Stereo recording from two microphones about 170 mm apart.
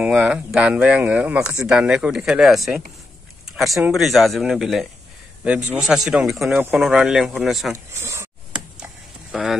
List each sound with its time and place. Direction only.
0.0 s speech: 5° right (ahead or behind)
8.0 s a sound: 15° right (ahead or behind)
8.7 s sizzle: 5° right (ahead or behind)